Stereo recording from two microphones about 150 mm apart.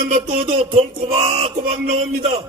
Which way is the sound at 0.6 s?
45° right (ahead or behind).